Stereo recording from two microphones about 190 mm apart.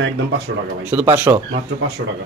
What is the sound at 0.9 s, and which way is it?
Speech, 10° right (ahead or behind).